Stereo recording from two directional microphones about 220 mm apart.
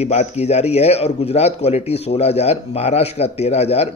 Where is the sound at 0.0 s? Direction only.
30° left (ahead or behind).